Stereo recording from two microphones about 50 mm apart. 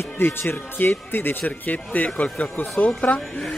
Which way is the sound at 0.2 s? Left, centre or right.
Left.